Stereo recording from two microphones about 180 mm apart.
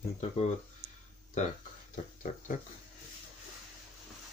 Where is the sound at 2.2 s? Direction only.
45° left (ahead or behind).